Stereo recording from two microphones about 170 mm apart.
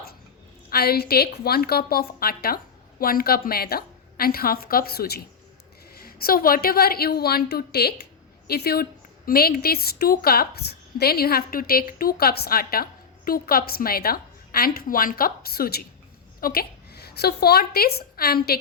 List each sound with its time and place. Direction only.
0.7 s a woman's voice: 65° left (ahead or behind)